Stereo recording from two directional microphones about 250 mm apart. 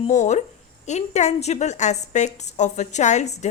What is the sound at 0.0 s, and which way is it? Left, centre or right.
A woman's voice, left.